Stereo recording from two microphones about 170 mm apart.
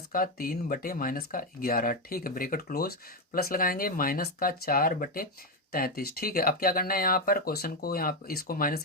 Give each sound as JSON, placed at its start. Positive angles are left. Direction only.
{"t": 0.1, "sound": "speech", "side_deg": 60}